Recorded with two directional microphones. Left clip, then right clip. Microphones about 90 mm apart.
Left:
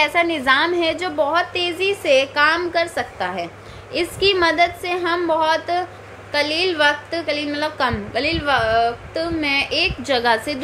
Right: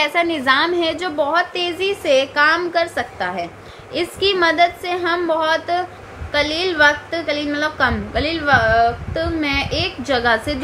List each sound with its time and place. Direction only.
0.0 s a woman's voice: 20° left (ahead or behind)